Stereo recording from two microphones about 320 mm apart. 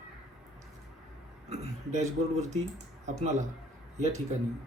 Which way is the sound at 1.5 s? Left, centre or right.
Right.